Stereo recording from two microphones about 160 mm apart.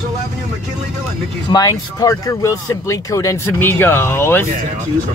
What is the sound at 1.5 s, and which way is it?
Speech, 25° left (ahead or behind).